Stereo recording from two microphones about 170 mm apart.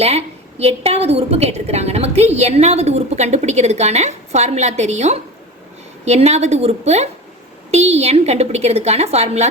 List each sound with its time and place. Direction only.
0.0 s a woman's voice: 35° right (ahead or behind)